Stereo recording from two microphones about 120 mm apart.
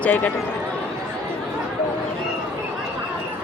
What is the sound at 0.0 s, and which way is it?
Speech, 15° left (ahead or behind).